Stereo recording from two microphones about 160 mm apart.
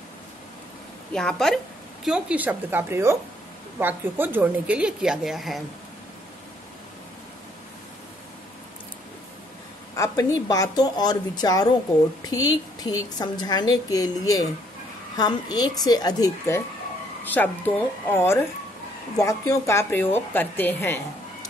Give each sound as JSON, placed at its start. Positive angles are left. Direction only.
{"t": 1.1, "sound": "a woman's voice", "side_deg": 5}
{"t": 9.9, "sound": "a woman's voice", "side_deg": 20}